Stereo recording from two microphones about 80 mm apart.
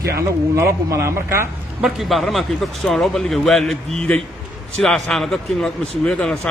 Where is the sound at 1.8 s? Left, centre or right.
Centre.